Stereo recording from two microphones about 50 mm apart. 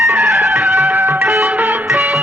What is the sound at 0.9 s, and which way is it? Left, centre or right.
Music, right.